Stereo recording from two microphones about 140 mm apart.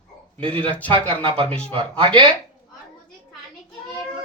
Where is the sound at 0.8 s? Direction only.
35° right (ahead or behind).